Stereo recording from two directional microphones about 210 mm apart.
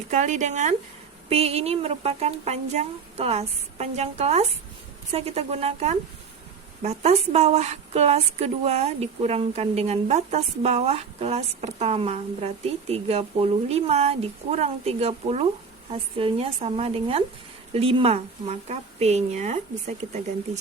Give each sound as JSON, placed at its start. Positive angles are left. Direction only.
{"t": 0.1, "sound": "a woman's voice", "side_deg": -35}